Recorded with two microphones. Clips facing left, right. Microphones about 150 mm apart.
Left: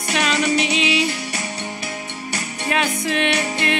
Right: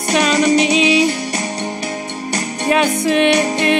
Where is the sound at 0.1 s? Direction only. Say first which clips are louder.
Right 6 dB; 35° right (ahead or behind).